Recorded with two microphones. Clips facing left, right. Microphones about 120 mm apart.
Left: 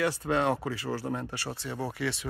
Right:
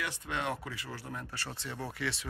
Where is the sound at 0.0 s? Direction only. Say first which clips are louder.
Left 9 dB; 35° left (ahead or behind).